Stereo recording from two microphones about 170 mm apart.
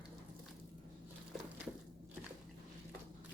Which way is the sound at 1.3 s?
Centre (ahead or behind).